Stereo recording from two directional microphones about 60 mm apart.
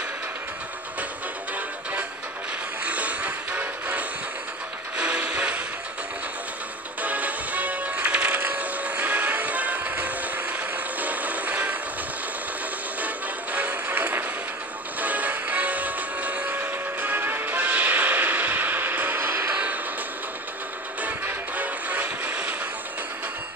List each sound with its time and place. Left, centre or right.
2.8 s music: right
7.0 s music: right
13.0 s music: right
19.5 s music: right
21.0 s music: right